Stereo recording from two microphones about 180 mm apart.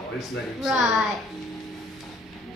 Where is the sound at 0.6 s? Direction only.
Centre (ahead or behind).